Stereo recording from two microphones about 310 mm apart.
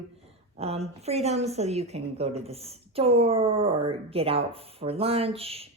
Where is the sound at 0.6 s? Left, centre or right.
Centre.